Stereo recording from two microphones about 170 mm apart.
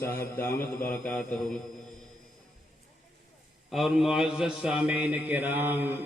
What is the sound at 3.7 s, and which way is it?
A man's voice, centre (ahead or behind).